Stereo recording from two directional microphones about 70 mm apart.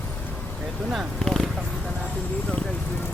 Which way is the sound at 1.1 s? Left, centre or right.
Centre.